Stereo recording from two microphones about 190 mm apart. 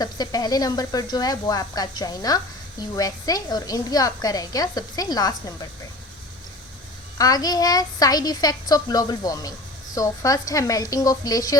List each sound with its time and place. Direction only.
0.0 s a child's voice: 20° left (ahead or behind)
7.2 s a child's voice: 20° left (ahead or behind)